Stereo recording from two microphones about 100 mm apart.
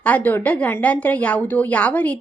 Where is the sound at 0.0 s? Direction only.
20° left (ahead or behind).